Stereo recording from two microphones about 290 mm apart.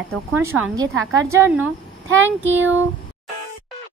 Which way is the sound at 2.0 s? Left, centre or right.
Right.